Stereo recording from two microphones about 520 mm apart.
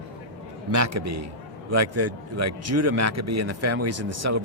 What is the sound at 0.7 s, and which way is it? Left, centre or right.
A man's voice, right.